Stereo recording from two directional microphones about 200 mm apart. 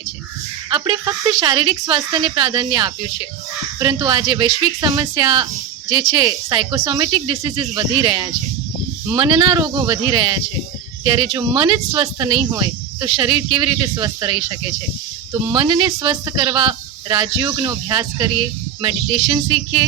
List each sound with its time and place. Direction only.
0.7 s speech: 25° right (ahead or behind)